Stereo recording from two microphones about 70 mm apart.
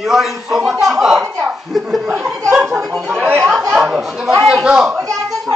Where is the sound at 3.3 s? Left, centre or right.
Right.